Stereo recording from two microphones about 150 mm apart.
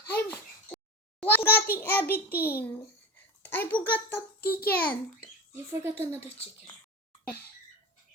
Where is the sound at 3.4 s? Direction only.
15° left (ahead or behind).